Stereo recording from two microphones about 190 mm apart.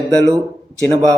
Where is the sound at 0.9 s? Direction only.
20° right (ahead or behind).